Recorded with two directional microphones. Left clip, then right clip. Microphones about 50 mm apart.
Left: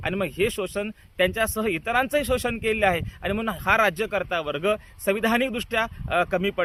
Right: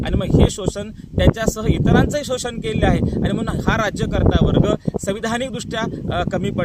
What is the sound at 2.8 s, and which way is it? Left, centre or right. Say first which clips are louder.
Speech: right 3 dB; right.